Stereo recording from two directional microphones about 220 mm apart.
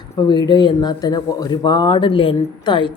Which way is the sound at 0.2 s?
20° left (ahead or behind).